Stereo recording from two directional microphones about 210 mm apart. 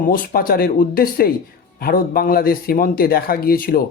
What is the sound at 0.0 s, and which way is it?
A man's voice, 40° left (ahead or behind).